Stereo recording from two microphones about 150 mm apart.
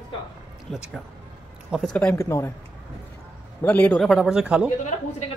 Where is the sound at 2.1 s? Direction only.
20° left (ahead or behind).